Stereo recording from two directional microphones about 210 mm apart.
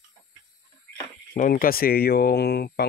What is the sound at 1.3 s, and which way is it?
Speech, 40° left (ahead or behind).